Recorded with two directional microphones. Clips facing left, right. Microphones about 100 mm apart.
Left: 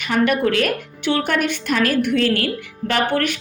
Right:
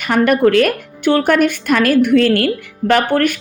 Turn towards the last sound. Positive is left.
turn(degrees=-50)  # may be behind; listen again after turning